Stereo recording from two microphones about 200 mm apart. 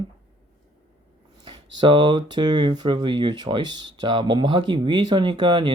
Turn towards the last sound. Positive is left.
turn(degrees=-25)  # may be behind; listen again after turning